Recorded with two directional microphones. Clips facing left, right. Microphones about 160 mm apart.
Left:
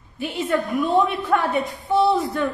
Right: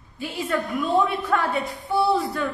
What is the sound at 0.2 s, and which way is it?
A woman's voice, 20° left (ahead or behind).